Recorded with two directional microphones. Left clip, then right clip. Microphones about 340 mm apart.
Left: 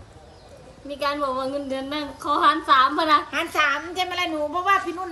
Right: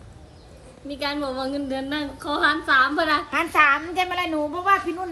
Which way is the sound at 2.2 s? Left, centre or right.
Centre.